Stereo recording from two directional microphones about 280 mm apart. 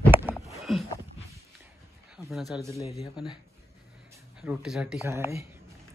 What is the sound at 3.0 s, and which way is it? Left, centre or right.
Speech, centre.